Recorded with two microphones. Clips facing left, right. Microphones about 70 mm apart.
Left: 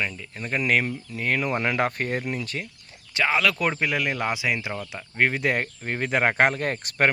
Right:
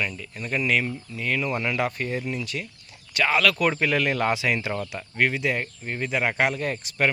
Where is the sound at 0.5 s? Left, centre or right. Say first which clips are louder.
Left 1 dB; left.